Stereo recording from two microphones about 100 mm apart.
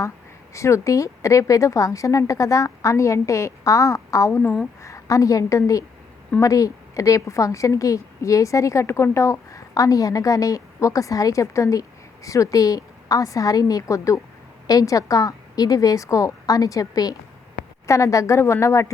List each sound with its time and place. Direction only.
0.5 s a woman's voice: 30° left (ahead or behind)